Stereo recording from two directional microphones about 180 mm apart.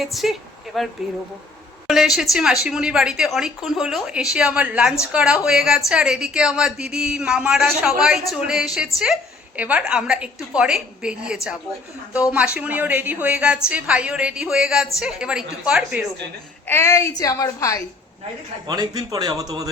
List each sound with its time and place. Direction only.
0.0 s a woman's voice: centre (ahead or behind)
1.9 s a woman's voice: centre (ahead or behind)
16.6 s a woman's voice: 15° left (ahead or behind)
18.7 s speech: 20° right (ahead or behind)